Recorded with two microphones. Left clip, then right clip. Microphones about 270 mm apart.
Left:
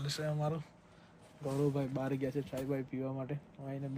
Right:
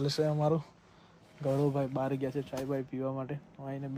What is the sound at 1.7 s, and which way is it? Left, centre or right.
Speech, centre.